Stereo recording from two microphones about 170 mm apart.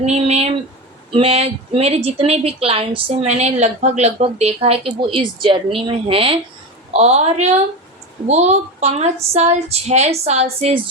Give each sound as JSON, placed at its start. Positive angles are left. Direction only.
{"t": 0.0, "sound": "a woman's voice", "side_deg": -40}